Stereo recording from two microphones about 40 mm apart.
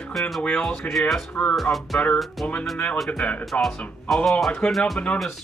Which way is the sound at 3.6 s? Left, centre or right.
Centre.